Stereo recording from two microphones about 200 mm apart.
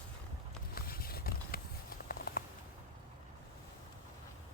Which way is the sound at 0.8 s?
50° left (ahead or behind).